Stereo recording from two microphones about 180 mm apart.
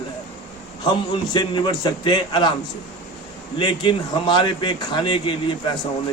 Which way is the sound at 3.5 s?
25° left (ahead or behind).